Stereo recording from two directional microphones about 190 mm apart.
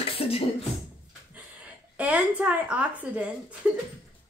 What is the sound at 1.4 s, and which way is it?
A woman's voice, 10° right (ahead or behind).